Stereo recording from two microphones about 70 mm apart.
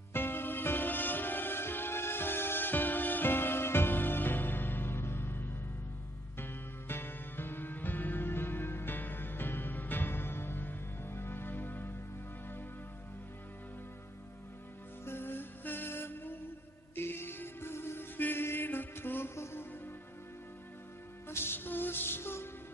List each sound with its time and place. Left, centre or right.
0.1 s music: left
15.0 s music: left
21.3 s music: left